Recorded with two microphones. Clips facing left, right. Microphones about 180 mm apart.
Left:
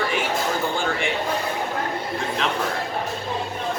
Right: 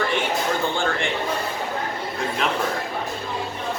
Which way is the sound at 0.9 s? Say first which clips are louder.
Even; centre (ahead or behind).